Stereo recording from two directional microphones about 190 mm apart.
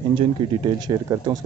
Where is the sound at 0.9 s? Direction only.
20° right (ahead or behind).